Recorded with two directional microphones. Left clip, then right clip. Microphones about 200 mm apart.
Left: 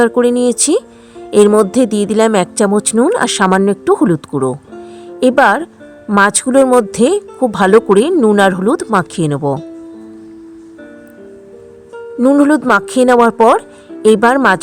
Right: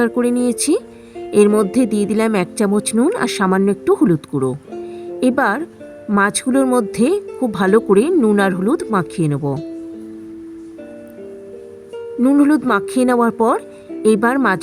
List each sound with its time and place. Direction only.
0.0 s speech: 25° left (ahead or behind)
12.2 s speech: 25° left (ahead or behind)